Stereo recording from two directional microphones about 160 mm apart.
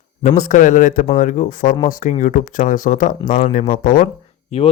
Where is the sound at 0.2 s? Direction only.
50° left (ahead or behind).